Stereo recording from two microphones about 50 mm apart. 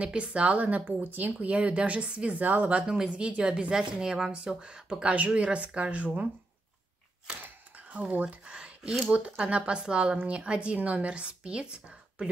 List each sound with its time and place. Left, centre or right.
0.0 s speech: right
2.9 s speech: centre
5.1 s speech: right
7.4 s a sound: right
8.1 s speech: right
8.5 s a sound: centre
9.1 s speech: right